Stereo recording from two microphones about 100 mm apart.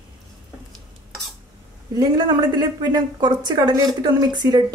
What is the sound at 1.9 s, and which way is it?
A woman's voice, 40° right (ahead or behind).